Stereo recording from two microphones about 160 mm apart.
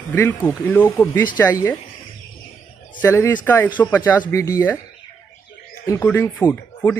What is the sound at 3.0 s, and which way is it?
Speech, 15° left (ahead or behind).